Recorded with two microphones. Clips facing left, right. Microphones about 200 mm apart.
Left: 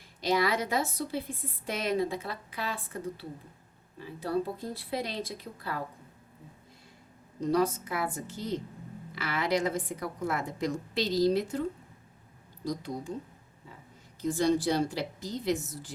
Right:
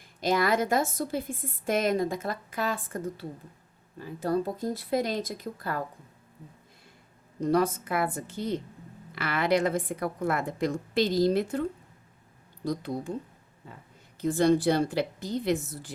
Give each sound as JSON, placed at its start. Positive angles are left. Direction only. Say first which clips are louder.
{"t": 0.2, "sound": "a woman's voice", "louder": "right 3 dB", "side_deg": -50}
{"t": 7.4, "sound": "a woman's voice", "louder": "right 2 dB", "side_deg": -55}
{"t": 12.6, "sound": "a woman's voice", "louder": "right 3 dB", "side_deg": -60}
{"t": 14.2, "sound": "a woman's voice", "louder": "right 4 dB", "side_deg": -55}